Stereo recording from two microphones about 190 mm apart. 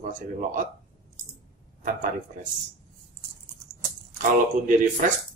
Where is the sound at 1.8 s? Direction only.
45° right (ahead or behind).